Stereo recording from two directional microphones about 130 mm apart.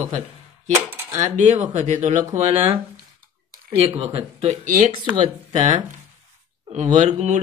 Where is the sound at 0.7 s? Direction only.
15° right (ahead or behind).